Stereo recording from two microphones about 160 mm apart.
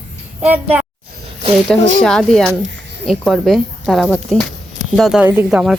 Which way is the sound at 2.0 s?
5° left (ahead or behind).